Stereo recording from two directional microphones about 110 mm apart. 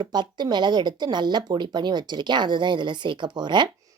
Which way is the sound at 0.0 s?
45° right (ahead or behind).